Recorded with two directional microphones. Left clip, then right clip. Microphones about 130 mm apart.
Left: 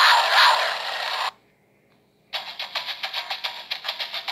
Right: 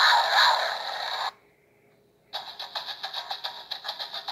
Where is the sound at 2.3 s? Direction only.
50° left (ahead or behind).